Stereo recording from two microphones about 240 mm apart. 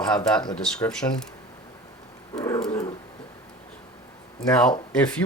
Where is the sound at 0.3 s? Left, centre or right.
Centre.